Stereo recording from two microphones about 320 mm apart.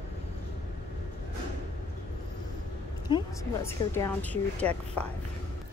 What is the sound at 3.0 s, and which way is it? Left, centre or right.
A woman's voice, centre.